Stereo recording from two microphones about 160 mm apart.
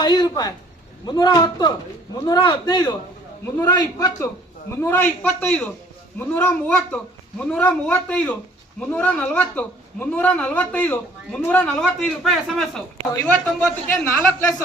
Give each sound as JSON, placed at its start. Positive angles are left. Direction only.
{"t": 0.0, "sound": "a man's voice", "side_deg": 25}